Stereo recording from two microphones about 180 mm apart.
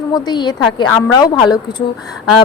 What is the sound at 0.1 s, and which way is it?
Speech, 25° left (ahead or behind).